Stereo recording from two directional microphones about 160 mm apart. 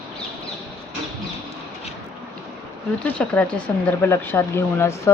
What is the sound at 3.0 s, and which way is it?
Speech, 10° left (ahead or behind).